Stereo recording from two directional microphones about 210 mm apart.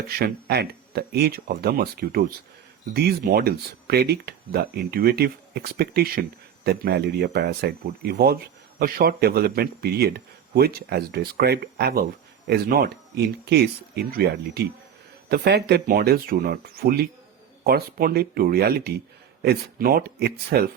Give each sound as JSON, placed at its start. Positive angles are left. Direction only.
{"t": 0.1, "sound": "speech", "side_deg": -50}